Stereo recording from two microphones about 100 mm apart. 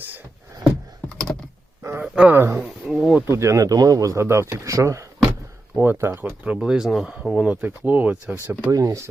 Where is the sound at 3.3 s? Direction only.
30° right (ahead or behind).